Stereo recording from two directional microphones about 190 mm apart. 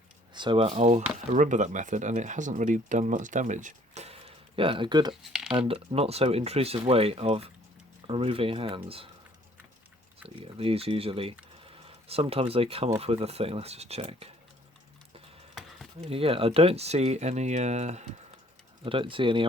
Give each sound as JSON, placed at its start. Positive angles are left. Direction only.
{"t": 0.3, "sound": "speech", "side_deg": -25}
{"t": 5.3, "sound": "speech", "side_deg": -5}
{"t": 5.5, "sound": "speech", "side_deg": -30}
{"t": 10.2, "sound": "speech", "side_deg": -30}
{"t": 15.5, "sound": "a sound", "side_deg": 0}
{"t": 16.0, "sound": "speech", "side_deg": -30}